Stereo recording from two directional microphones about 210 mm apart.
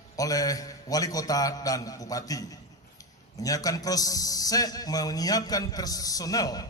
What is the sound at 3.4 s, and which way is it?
A man's voice, 15° left (ahead or behind).